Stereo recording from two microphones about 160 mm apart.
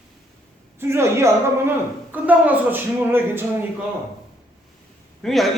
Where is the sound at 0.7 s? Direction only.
15° right (ahead or behind).